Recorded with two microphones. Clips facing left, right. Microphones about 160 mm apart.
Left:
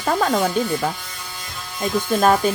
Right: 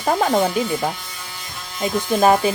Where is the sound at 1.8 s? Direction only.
10° right (ahead or behind).